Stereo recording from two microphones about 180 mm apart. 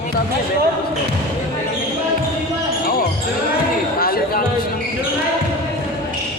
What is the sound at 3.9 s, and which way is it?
Chatter, 55° left (ahead or behind).